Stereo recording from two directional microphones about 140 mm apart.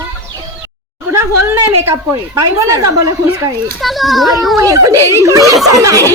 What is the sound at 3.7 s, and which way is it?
Speech, centre (ahead or behind).